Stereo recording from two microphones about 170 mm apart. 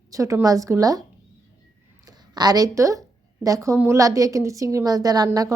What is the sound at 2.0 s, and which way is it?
A woman's voice, 25° right (ahead or behind).